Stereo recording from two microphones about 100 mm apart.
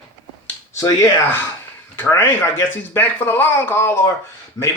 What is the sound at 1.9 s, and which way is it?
Speech, 25° left (ahead or behind).